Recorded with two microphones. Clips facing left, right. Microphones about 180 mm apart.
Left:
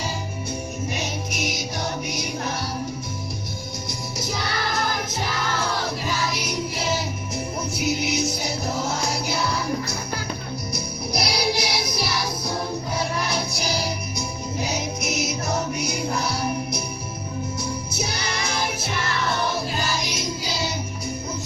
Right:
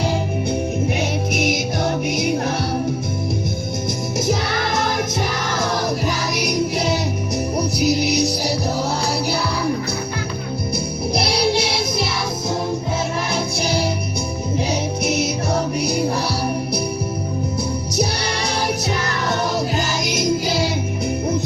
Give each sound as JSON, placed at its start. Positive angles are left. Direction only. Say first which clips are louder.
{"t": 0.9, "sound": "music", "louder": "right 8 dB", "side_deg": -55}
{"t": 7.6, "sound": "music", "louder": "right 6 dB", "side_deg": -35}
{"t": 11.4, "sound": "music", "louder": "right 6 dB", "side_deg": -25}
{"t": 14.7, "sound": "music", "louder": "right 7 dB", "side_deg": -30}
{"t": 17.9, "sound": "music", "louder": "right 7 dB", "side_deg": -35}